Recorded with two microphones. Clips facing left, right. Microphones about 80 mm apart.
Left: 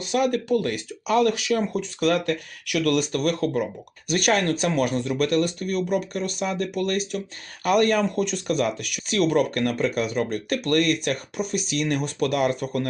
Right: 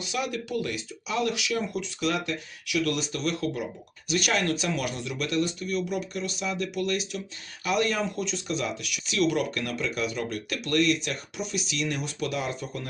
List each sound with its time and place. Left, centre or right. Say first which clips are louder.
0.0 s speech: left 8 dB; left